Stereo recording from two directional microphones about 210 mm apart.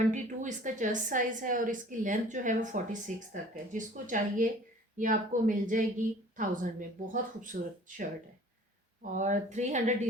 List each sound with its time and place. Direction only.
0.1 s a woman's voice: 35° right (ahead or behind)
9.1 s a woman's voice: 35° right (ahead or behind)